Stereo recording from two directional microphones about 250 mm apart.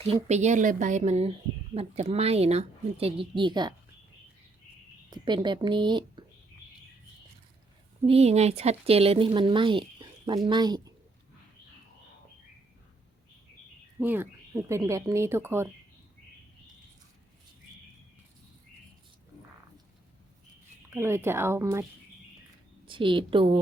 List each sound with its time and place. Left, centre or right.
0.0 s speech: right
5.1 s speech: centre
8.0 s speech: right
14.0 s speech: centre
20.9 s speech: centre
22.9 s speech: centre